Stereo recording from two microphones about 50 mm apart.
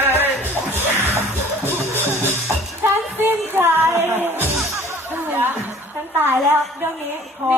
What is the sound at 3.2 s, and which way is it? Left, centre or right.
Music, right.